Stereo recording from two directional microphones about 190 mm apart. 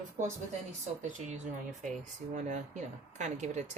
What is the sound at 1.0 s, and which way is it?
Speech, 40° right (ahead or behind).